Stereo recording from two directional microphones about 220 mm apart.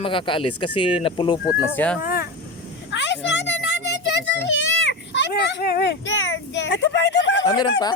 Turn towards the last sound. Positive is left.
turn(degrees=20)  # may be behind; listen again after turning